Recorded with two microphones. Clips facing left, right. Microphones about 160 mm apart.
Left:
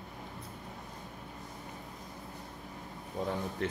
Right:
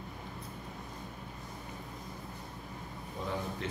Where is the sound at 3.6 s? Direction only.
50° left (ahead or behind).